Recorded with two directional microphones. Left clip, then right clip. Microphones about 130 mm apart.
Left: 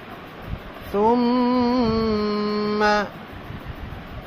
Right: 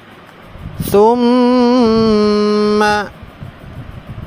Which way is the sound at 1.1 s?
90° right.